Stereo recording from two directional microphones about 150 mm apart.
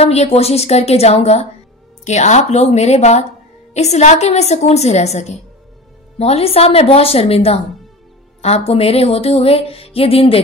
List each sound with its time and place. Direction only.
0.0 s a woman's voice: 45° left (ahead or behind)
6.1 s music: 40° left (ahead or behind)